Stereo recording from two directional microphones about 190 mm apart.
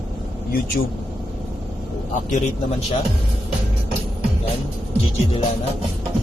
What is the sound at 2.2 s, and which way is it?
Speech, 40° left (ahead or behind).